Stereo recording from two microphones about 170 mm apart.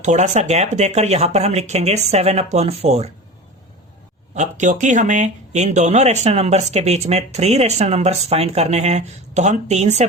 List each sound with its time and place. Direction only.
0.0 s speech: 45° right (ahead or behind)
4.4 s speech: 45° right (ahead or behind)